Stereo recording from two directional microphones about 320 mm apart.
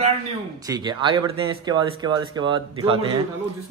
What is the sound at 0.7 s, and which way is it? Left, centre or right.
Speech, centre.